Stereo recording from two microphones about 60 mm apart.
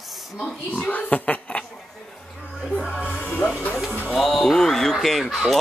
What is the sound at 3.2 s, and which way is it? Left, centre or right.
Music, left.